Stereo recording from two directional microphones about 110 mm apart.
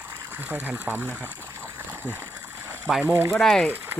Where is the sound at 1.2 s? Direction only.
20° right (ahead or behind).